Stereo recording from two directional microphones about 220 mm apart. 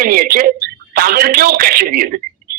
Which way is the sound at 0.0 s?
40° right (ahead or behind).